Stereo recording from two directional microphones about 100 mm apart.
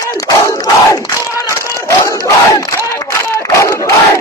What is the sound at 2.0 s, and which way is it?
Battle cry, 35° left (ahead or behind).